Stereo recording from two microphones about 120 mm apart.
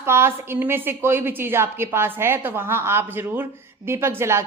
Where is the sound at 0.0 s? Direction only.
20° right (ahead or behind).